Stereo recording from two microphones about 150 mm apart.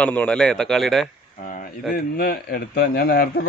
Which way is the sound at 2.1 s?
90° left.